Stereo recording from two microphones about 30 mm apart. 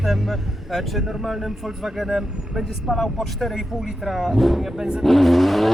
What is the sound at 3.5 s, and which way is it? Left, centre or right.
Speech, centre.